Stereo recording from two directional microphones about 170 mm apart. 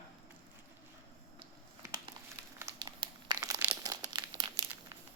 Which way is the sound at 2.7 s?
25° right (ahead or behind).